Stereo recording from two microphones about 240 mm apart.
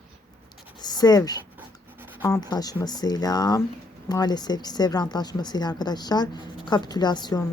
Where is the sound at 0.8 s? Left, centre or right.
Centre.